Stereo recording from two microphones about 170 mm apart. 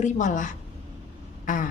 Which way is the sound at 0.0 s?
45° left (ahead or behind).